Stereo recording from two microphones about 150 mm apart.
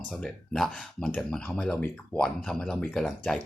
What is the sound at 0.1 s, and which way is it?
Speech, 5° left (ahead or behind).